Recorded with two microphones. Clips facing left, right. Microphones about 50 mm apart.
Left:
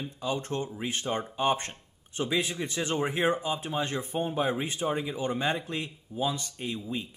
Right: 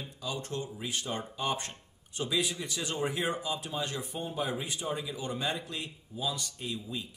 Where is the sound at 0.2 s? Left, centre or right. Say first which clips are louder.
Left 5 dB; left.